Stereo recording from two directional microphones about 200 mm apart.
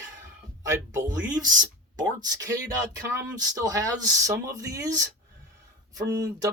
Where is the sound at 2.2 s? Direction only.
20° right (ahead or behind).